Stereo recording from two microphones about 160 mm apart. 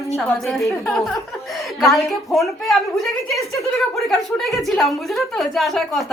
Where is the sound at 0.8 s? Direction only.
Centre (ahead or behind).